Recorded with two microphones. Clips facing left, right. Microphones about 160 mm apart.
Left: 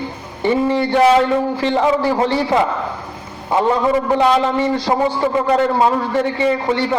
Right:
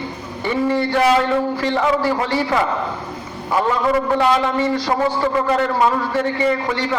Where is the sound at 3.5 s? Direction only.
25° left (ahead or behind).